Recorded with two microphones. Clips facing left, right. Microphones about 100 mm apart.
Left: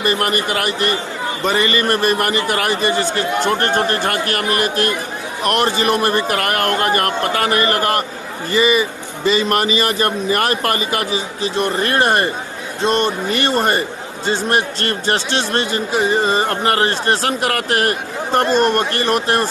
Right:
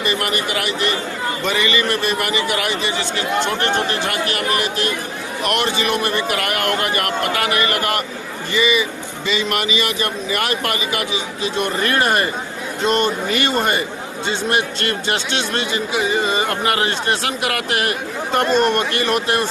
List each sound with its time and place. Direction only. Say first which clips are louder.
0.0 s a man's voice: left 3 dB; 40° left (ahead or behind)